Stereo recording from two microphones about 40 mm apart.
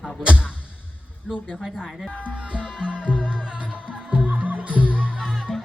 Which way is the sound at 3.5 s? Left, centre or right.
Right.